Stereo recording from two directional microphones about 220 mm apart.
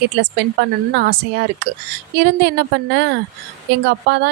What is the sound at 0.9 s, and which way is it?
A woman's voice, 45° right (ahead or behind).